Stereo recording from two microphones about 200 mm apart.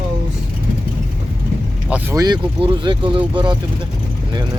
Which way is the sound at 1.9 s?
15° right (ahead or behind).